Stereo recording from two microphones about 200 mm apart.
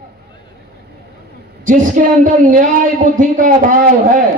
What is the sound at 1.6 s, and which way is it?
A woman's voice, 40° right (ahead or behind).